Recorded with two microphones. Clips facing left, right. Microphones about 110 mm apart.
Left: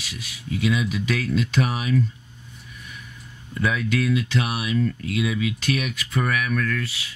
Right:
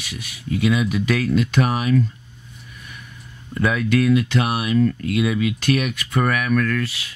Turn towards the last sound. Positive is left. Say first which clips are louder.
# right 5 dB
turn(degrees=-60)  # may be behind; listen again after turning